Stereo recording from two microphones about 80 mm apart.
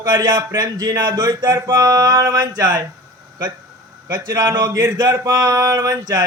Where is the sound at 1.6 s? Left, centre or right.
Right.